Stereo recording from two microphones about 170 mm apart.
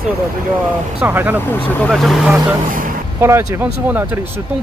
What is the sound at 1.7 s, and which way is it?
Speech, 5° left (ahead or behind).